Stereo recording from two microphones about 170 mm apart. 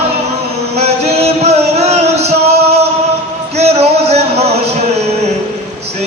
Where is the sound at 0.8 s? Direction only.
40° right (ahead or behind).